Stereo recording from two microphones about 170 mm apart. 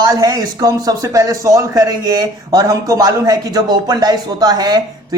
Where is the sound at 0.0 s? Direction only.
20° right (ahead or behind).